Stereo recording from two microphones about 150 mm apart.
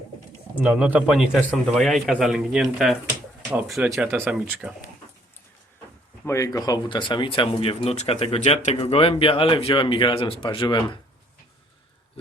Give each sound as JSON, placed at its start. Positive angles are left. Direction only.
{"t": 0.6, "sound": "speech", "side_deg": -5}
{"t": 1.4, "sound": "speech", "side_deg": 5}
{"t": 6.2, "sound": "speech", "side_deg": 20}